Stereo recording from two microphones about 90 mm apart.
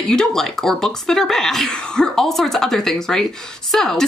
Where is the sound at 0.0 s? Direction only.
5° left (ahead or behind).